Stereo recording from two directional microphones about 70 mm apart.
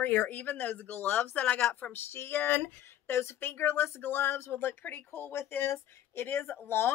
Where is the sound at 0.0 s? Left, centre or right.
Left.